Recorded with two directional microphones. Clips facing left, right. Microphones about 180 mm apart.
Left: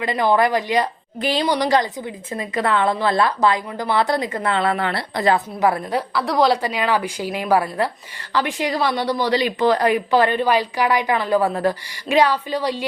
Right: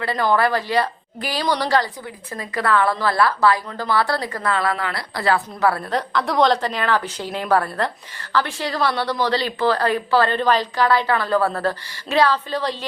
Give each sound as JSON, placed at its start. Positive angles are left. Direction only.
{"t": 0.0, "sound": "a woman's voice", "side_deg": 15}
{"t": 6.0, "sound": "a woman's voice", "side_deg": 5}